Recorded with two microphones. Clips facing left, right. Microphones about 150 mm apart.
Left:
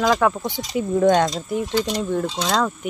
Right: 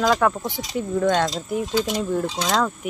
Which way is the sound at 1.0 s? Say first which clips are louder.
Left 4 dB; 20° left (ahead or behind).